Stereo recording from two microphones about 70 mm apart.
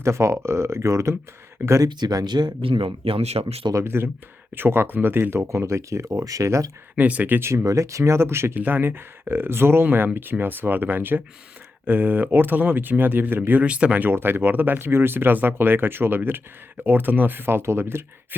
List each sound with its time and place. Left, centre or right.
0.0 s speech: right
1.8 s speech: right
3.8 s speech: right
6.9 s speech: right
7.4 s speech: right; by 14.1 s centre
14.1 s speech: right